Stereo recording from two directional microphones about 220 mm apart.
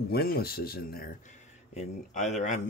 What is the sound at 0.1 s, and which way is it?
Speech, 45° left (ahead or behind).